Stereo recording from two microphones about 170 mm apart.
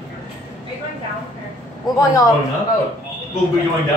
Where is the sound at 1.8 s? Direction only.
20° left (ahead or behind).